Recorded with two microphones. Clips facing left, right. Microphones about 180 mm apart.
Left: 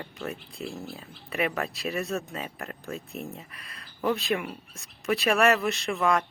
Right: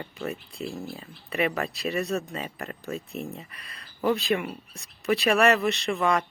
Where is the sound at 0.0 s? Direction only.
Centre (ahead or behind).